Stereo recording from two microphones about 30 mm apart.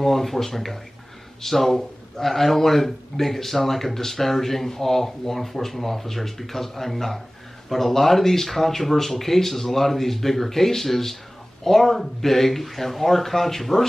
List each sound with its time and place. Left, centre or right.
0.0 s a man's voice: centre